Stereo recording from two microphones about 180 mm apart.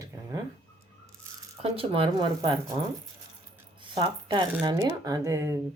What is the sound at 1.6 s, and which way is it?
Speech, 30° right (ahead or behind).